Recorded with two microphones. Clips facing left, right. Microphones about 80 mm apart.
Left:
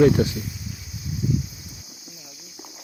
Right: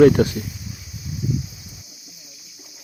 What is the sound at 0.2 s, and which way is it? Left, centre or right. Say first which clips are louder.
Speech: right 4 dB; right.